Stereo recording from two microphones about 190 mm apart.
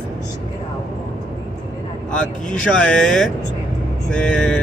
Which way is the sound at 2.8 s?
5° left (ahead or behind).